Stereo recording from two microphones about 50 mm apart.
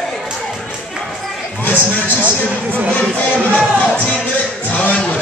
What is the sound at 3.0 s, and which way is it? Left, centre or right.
Music, left.